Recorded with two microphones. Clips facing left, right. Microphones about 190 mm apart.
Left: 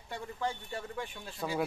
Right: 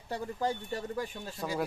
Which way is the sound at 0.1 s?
40° right (ahead or behind).